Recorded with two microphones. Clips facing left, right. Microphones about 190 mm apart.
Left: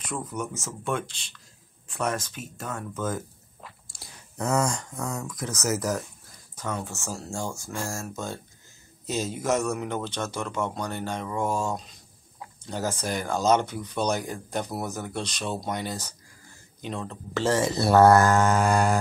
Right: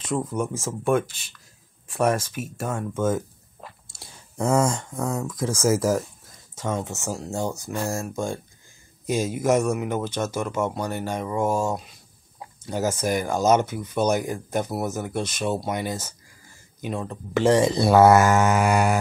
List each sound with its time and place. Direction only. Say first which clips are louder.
0.1 s speech: right 7 dB; 25° right (ahead or behind)
2.7 s speech: right 6 dB; 25° right (ahead or behind)
3.8 s clicking: right 2 dB; 25° right (ahead or behind)
5.0 s speech: right 7 dB; 25° right (ahead or behind); by 18.9 s 5° right (ahead or behind)